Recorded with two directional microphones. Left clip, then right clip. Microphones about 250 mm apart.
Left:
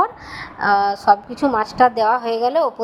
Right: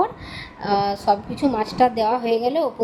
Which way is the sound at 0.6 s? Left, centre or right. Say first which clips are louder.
Left 5 dB; centre.